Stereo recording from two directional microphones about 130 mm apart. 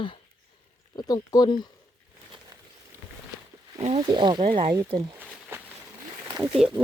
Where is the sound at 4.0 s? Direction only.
35° right (ahead or behind).